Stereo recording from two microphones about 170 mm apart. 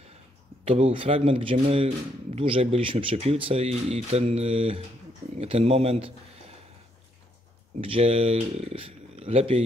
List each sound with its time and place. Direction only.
0.7 s speech: 35° right (ahead or behind)
7.8 s speech: 35° right (ahead or behind)